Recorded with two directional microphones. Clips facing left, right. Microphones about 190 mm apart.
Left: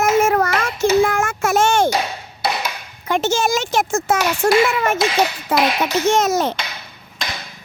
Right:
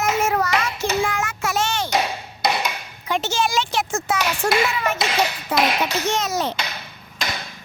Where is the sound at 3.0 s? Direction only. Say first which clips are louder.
Left 4 dB; 50° left (ahead or behind).